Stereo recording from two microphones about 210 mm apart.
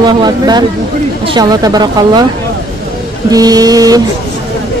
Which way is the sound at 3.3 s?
15° right (ahead or behind).